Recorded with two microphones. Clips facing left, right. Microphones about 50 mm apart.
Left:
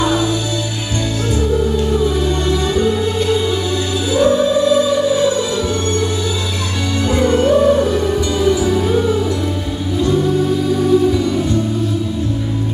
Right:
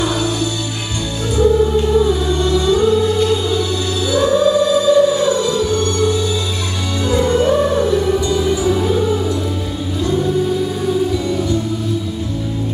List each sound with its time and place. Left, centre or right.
2.2 s music: left
4.1 s music: left
7.1 s music: left